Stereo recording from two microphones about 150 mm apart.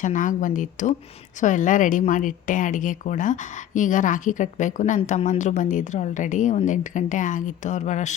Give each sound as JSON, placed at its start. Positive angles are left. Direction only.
{"t": 0.0, "sound": "speech", "side_deg": 60}